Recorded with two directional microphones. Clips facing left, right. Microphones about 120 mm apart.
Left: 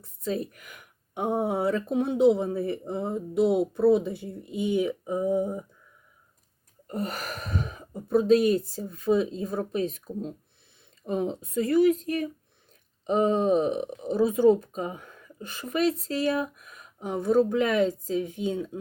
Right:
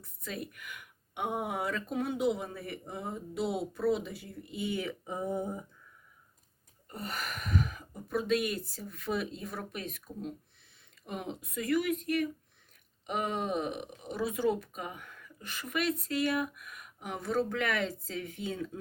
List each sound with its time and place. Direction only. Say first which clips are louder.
0.0 s speech: left 10 dB; 30° left (ahead or behind); by 5.6 s 10° left (ahead or behind)
6.8 s speech: left 7 dB; 45° left (ahead or behind); by 18.8 s 20° left (ahead or behind)